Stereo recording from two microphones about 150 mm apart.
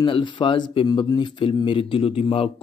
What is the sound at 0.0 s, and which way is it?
Speech, 30° left (ahead or behind).